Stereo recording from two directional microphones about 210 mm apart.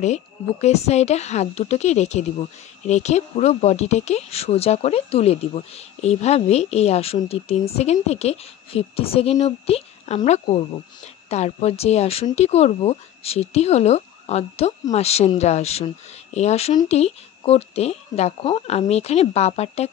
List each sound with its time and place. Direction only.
0.0 s speech: 35° left (ahead or behind)